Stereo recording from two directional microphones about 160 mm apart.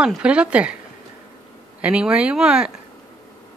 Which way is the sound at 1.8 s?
5° right (ahead or behind).